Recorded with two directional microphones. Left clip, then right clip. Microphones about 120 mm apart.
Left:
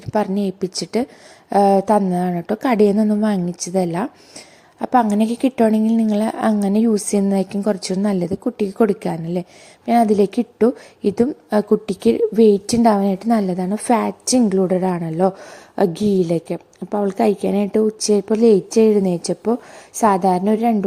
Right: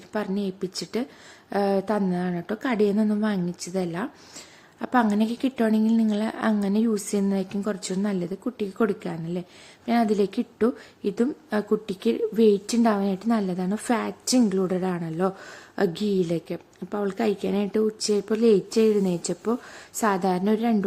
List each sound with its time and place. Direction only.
0.1 s a woman's voice: 50° left (ahead or behind)
13.7 s a woman's voice: 25° left (ahead or behind)
13.9 s a woman's voice: 40° left (ahead or behind)